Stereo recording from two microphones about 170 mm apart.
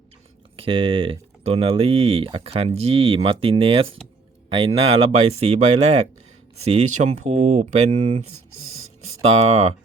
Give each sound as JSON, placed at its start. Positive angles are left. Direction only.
{"t": 0.5, "sound": "speech", "side_deg": -35}
{"t": 9.2, "sound": "speech", "side_deg": -35}